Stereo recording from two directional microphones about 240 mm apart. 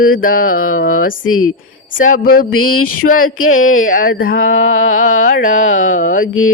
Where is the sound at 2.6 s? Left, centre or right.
Left.